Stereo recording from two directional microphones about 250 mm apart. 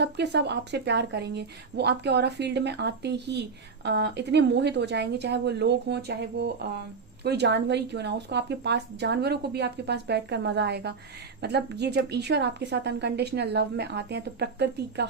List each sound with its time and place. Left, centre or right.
0.0 s a woman's voice: right